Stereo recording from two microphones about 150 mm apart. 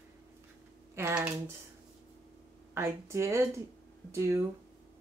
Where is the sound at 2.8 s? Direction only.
20° right (ahead or behind).